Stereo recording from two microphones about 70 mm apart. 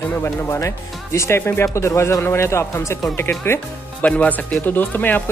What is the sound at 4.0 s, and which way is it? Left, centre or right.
Speech, centre.